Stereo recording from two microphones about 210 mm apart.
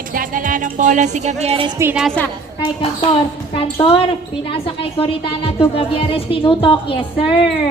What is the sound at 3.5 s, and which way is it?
A woman's voice, 25° left (ahead or behind).